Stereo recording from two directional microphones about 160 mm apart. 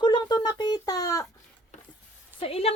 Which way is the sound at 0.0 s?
25° left (ahead or behind).